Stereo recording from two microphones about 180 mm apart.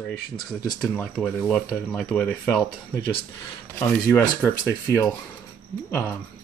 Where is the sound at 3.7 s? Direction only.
10° left (ahead or behind).